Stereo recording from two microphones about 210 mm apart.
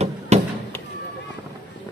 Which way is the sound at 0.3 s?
30° right (ahead or behind).